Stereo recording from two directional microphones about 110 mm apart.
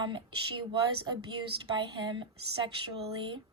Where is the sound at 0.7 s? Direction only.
45° right (ahead or behind).